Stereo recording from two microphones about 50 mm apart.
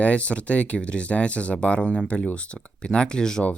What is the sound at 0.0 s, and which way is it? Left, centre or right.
Speech, left.